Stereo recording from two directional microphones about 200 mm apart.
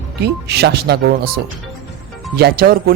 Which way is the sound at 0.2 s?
55° right (ahead or behind).